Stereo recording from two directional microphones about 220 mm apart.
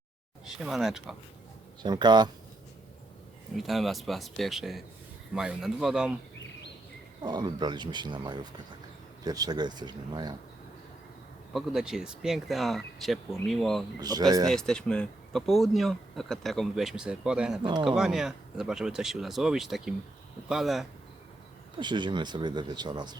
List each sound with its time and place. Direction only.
0.4 s speech: centre (ahead or behind)
1.8 s speech: 20° right (ahead or behind)
3.6 s speech: centre (ahead or behind)
7.2 s speech: 20° right (ahead or behind)
11.5 s speech: centre (ahead or behind)
14.0 s speech: 15° right (ahead or behind)
14.4 s speech: 5° left (ahead or behind)
17.6 s speech: 20° right (ahead or behind)
17.8 s speech: centre (ahead or behind)
21.8 s speech: 20° right (ahead or behind)